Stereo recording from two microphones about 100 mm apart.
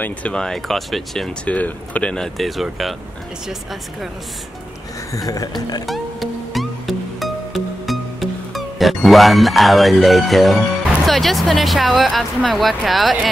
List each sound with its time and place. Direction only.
0.0 s speech: 10° left (ahead or behind)
5.1 s speech: 35° left (ahead or behind)
5.9 s music: centre (ahead or behind)
11.1 s speech: centre (ahead or behind)